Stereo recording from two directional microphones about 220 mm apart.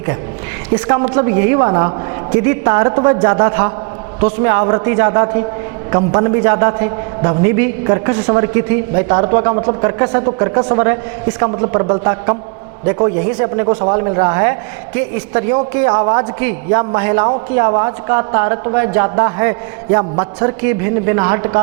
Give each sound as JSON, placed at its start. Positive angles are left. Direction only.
{"t": 0.7, "sound": "a man's voice", "side_deg": -15}